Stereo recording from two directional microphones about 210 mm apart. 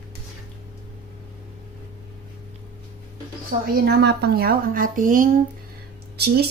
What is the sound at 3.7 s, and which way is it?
Speech, 50° right (ahead or behind).